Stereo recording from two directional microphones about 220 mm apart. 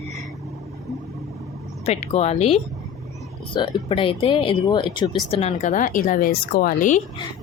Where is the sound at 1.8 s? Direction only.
30° left (ahead or behind).